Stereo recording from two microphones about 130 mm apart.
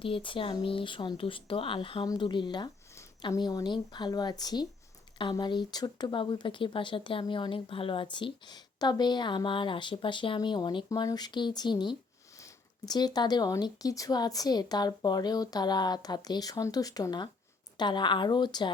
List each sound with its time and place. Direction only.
0.0 s speech: 40° left (ahead or behind)